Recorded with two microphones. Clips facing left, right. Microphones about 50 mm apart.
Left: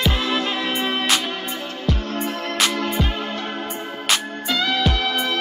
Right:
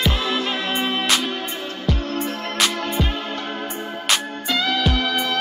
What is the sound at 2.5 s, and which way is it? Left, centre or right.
Music, centre.